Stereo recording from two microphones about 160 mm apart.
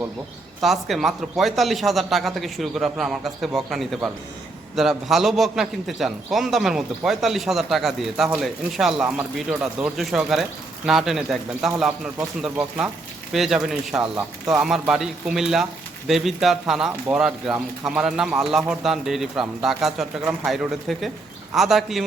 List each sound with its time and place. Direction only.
0.6 s speech: centre (ahead or behind)